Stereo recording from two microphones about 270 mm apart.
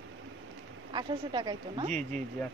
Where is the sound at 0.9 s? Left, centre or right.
Centre.